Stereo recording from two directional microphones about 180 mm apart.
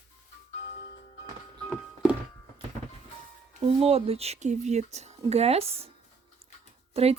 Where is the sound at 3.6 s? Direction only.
35° right (ahead or behind).